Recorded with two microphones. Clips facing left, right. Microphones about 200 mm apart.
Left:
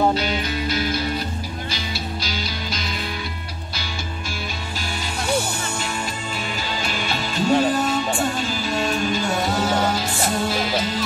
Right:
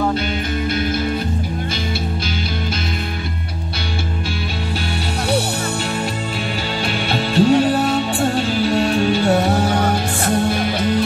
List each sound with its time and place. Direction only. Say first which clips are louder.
6.9 s music: right 6 dB; 65° right (ahead or behind)